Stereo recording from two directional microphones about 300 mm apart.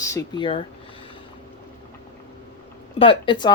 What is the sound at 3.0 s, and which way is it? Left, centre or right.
Speech, centre.